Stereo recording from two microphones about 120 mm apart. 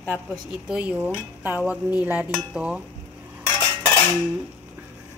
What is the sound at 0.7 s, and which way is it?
A woman's voice, 10° right (ahead or behind).